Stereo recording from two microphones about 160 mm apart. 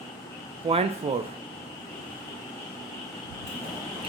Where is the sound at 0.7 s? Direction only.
35° right (ahead or behind).